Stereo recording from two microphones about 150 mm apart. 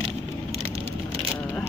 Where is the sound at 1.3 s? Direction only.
15° left (ahead or behind).